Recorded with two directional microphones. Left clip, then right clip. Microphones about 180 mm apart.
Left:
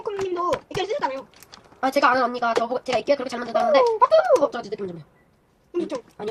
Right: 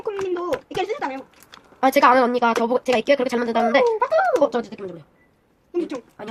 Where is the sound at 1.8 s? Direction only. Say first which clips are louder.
Right 4 dB; 50° right (ahead or behind).